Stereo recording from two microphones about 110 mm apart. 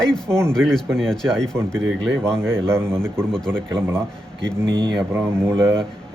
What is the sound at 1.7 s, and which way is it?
Speech, 20° right (ahead or behind).